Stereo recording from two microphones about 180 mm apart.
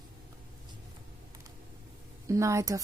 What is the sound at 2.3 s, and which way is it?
Speech, 15° right (ahead or behind).